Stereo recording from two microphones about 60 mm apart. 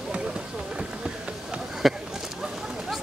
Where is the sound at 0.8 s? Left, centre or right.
Centre.